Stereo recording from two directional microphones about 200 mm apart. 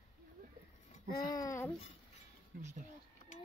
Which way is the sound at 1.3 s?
15° left (ahead or behind).